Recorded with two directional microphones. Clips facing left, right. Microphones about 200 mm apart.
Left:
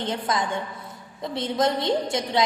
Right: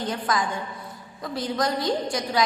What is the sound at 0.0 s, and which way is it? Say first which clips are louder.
A woman's voice: even; 25° left (ahead or behind).